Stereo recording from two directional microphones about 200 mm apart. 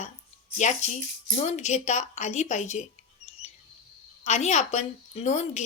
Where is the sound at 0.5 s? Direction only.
35° left (ahead or behind).